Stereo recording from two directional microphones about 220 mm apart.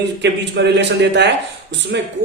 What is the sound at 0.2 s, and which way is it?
Speech, 50° right (ahead or behind).